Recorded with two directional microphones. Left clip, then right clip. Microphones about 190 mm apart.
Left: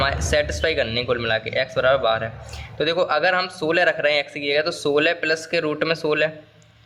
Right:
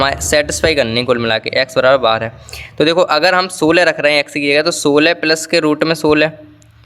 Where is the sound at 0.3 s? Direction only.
30° right (ahead or behind).